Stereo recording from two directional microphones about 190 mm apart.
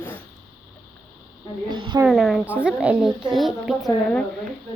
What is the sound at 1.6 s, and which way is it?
Speech, 25° right (ahead or behind).